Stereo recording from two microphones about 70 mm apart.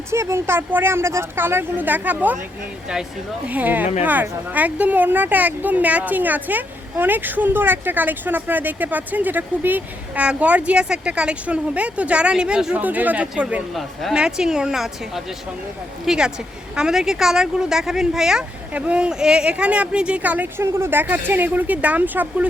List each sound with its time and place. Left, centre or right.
0.1 s speech: right
3.4 s speech: right
12.8 s speech: right